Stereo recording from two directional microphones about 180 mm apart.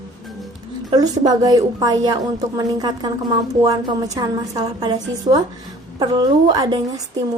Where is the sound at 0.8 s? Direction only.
20° right (ahead or behind).